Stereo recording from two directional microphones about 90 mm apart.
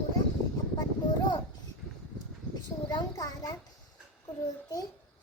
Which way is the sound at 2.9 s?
45° left (ahead or behind).